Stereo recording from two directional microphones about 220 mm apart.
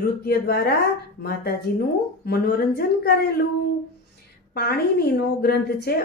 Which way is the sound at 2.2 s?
45° left (ahead or behind).